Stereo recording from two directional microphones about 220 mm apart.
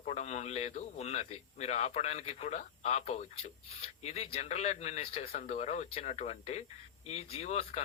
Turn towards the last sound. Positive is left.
turn(degrees=30)  # may be behind; listen again after turning